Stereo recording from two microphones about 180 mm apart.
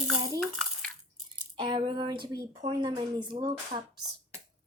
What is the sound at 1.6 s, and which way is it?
Speech, 25° right (ahead or behind).